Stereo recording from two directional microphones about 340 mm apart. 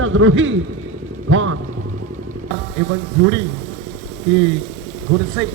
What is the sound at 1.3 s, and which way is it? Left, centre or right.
Speech, right.